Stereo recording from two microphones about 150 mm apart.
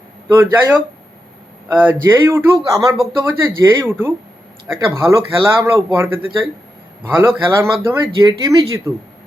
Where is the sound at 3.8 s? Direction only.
15° right (ahead or behind).